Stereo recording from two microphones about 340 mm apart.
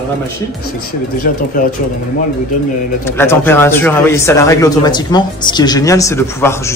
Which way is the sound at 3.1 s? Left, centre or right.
Centre.